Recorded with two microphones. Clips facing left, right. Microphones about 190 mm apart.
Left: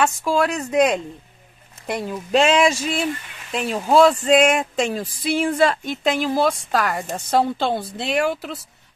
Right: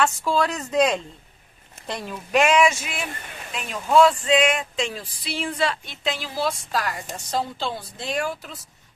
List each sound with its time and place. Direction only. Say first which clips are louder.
0.0 s speech: left 2 dB; 10° left (ahead or behind); by 8.5 s 70° left (ahead or behind)